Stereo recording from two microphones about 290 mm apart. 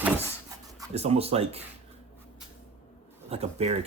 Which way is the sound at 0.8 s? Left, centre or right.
Right.